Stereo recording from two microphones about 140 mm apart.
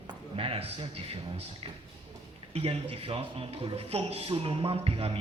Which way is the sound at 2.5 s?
45° right (ahead or behind).